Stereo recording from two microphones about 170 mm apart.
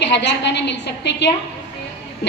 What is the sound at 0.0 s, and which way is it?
A woman's voice, 90° left.